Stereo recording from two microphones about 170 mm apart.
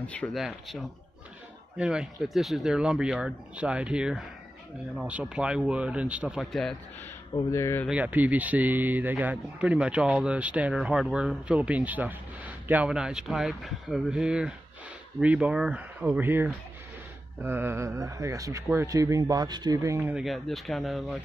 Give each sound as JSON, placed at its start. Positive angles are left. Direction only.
{"t": 0.0, "sound": "speech", "side_deg": 10}
{"t": 7.3, "sound": "speech", "side_deg": 20}
{"t": 7.9, "sound": "speech", "side_deg": -10}